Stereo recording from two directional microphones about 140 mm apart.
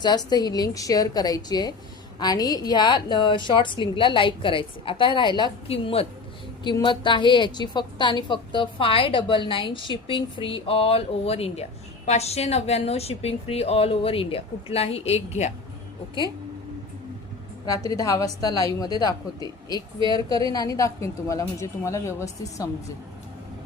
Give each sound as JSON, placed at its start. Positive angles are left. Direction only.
{"t": 0.3, "sound": "a woman's voice", "side_deg": 30}
{"t": 6.7, "sound": "a woman's voice", "side_deg": 35}
{"t": 17.7, "sound": "a woman's voice", "side_deg": 25}
{"t": 20.0, "sound": "a woman's voice", "side_deg": -35}
{"t": 20.5, "sound": "a woman's voice", "side_deg": 25}